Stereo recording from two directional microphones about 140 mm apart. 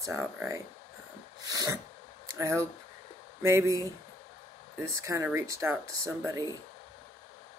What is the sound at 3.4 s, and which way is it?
Speech, 20° right (ahead or behind).